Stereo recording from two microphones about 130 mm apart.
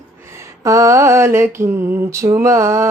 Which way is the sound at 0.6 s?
25° right (ahead or behind).